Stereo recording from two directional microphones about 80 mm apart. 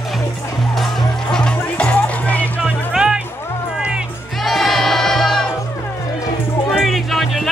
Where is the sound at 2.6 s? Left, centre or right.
Centre.